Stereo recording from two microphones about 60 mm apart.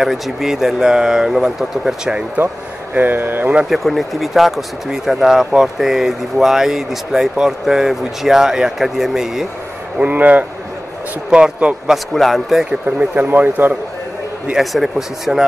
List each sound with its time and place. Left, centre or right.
0.0 s speech: centre
2.3 s a man's voice: right
3.7 s speech: centre
9.9 s speech: right
11.2 s speech: centre
12.1 s speech: centre
12.8 s speech: right
14.6 s speech: centre